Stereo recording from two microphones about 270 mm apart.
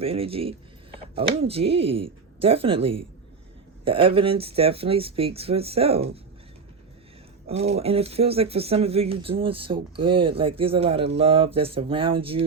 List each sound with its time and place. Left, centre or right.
0.0 s speech: right
7.4 s speech: right